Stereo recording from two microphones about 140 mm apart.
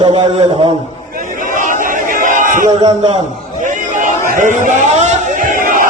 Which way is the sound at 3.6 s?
65° right (ahead or behind).